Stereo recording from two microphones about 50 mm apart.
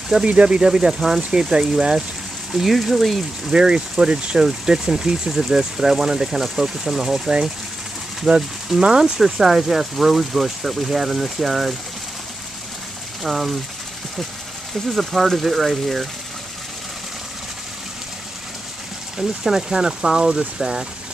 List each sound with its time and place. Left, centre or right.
0.1 s speech: centre
2.5 s speech: centre
3.5 s speech: centre
13.2 s speech: centre
14.9 s speech: centre
19.1 s speech: centre